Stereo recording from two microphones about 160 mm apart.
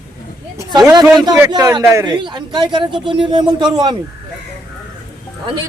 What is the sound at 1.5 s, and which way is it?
Speech, 25° right (ahead or behind).